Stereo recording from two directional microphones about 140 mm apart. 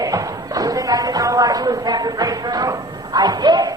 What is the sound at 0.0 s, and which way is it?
Speech, 25° right (ahead or behind).